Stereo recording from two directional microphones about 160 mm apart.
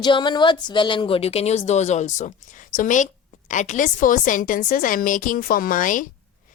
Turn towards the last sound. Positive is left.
turn(degrees=55)  # may be behind; listen again after turning